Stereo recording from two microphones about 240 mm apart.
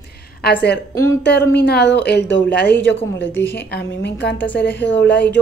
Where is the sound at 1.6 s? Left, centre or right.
Left.